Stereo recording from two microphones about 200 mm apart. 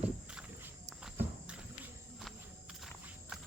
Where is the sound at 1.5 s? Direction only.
Centre (ahead or behind).